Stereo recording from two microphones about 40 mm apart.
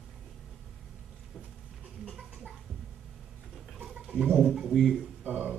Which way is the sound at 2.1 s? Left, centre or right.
Centre.